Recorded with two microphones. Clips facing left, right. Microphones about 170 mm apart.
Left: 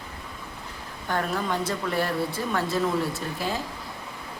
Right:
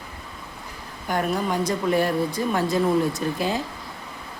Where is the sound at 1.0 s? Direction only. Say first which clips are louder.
Right 3 dB; 15° right (ahead or behind).